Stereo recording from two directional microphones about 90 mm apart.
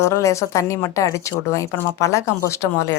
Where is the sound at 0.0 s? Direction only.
35° left (ahead or behind).